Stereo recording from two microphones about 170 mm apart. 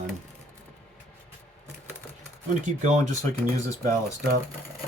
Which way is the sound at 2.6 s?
45° right (ahead or behind).